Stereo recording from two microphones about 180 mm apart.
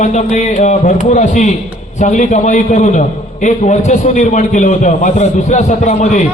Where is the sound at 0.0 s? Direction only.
40° left (ahead or behind).